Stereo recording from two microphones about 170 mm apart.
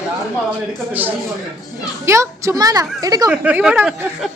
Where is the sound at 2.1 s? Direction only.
15° right (ahead or behind).